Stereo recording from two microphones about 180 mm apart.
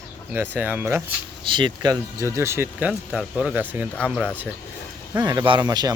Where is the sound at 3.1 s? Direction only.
Centre (ahead or behind).